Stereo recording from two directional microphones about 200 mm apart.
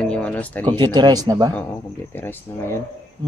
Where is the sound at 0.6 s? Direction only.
25° right (ahead or behind).